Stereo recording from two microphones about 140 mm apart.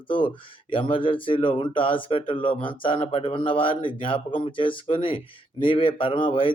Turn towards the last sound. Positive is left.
turn(degrees=40)  # may be behind; listen again after turning